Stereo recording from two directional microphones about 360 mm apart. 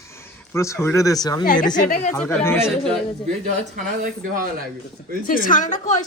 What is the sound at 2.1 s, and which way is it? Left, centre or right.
Speech, centre.